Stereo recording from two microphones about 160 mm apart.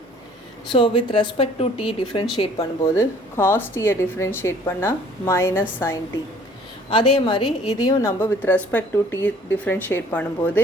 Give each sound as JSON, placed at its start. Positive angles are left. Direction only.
{"t": 0.7, "sound": "speech", "side_deg": 30}
{"t": 2.8, "sound": "speech", "side_deg": 15}
{"t": 6.9, "sound": "speech", "side_deg": 30}